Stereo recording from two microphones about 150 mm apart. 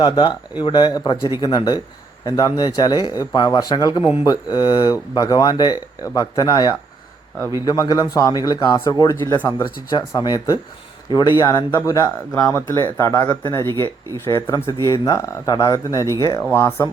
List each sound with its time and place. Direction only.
0.0 s speech: 30° left (ahead or behind); by 9.6 s 15° left (ahead or behind)
10.1 s speech: 25° left (ahead or behind)
14.4 s speech: 30° left (ahead or behind)
14.8 s speech: 25° right (ahead or behind)
15.0 s speech: 25° left (ahead or behind)